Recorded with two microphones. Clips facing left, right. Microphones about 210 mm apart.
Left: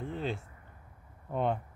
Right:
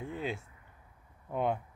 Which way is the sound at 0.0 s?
10° right (ahead or behind).